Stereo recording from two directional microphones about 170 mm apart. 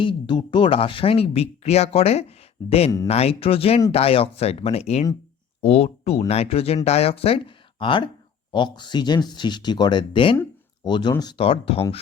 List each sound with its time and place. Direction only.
0.0 s speech: 30° left (ahead or behind)